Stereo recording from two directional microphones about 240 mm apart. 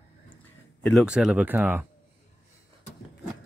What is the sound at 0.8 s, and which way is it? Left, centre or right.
Speech, centre.